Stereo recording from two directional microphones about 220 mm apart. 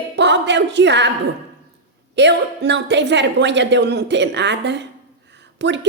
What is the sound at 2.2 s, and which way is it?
Speech, 50° right (ahead or behind).